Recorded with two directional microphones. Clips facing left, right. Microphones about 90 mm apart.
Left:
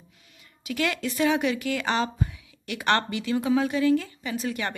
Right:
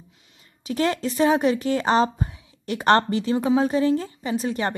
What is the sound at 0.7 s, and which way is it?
A woman's voice, 35° right (ahead or behind).